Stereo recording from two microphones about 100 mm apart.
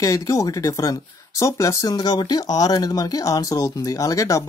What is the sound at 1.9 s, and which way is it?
Speech, 45° left (ahead or behind).